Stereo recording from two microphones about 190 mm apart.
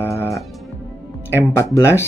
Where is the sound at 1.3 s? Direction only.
15° left (ahead or behind).